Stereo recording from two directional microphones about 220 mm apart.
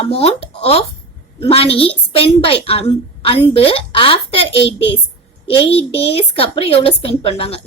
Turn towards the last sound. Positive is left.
turn(degrees=25)  # may be behind; listen again after turning